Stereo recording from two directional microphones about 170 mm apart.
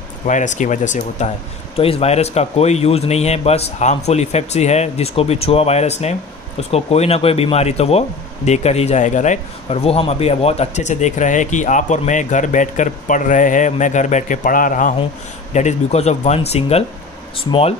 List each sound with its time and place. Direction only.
0.3 s a man's voice: 45° left (ahead or behind)